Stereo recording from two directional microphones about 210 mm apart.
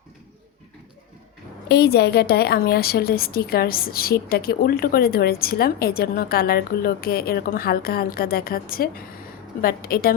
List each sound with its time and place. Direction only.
1.6 s a woman's voice: 50° left (ahead or behind)